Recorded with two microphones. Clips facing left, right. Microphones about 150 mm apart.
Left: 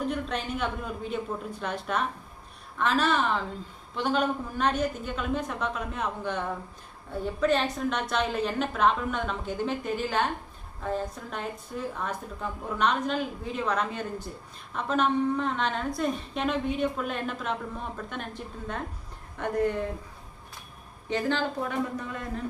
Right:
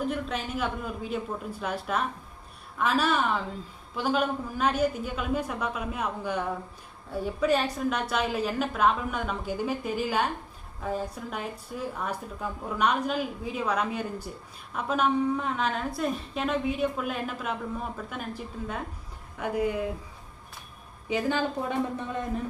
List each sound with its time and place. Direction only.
0.0 s a woman's voice: 5° right (ahead or behind)
21.1 s a woman's voice: 10° right (ahead or behind)
21.7 s speech: 20° right (ahead or behind)